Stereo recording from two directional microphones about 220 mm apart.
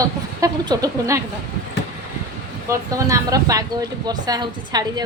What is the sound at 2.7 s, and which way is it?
A woman's voice, 15° right (ahead or behind).